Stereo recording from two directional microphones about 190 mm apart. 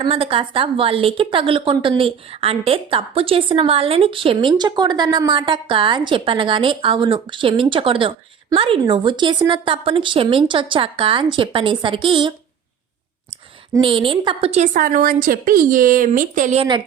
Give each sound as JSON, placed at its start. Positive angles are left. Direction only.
{"t": 0.0, "sound": "a woman's voice", "side_deg": -30}
{"t": 13.8, "sound": "a woman's voice", "side_deg": -25}